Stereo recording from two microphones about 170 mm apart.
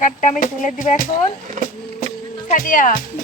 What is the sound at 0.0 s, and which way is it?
Speech, 50° left (ahead or behind).